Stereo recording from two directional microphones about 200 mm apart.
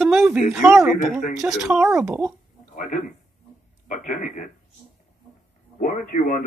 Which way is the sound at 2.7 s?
40° left (ahead or behind).